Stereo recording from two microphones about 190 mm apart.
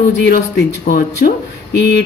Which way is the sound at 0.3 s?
55° left (ahead or behind).